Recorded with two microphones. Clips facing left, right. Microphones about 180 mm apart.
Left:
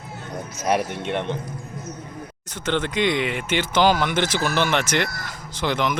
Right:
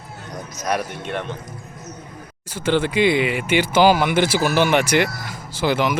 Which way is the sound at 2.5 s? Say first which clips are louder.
Right 5 dB; 10° right (ahead or behind).